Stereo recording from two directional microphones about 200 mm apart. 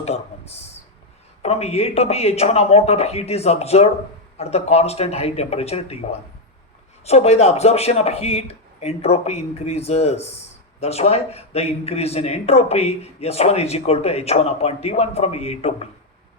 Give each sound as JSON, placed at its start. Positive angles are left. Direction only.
{"t": 0.0, "sound": "a man's voice", "side_deg": 30}